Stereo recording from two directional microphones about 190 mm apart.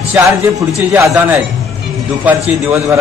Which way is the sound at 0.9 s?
15° right (ahead or behind).